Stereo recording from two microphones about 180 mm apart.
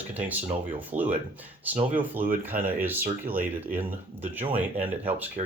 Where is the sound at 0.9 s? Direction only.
45° right (ahead or behind).